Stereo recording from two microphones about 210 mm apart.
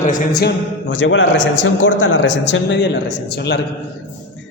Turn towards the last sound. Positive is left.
turn(degrees=55)  # may be behind; listen again after turning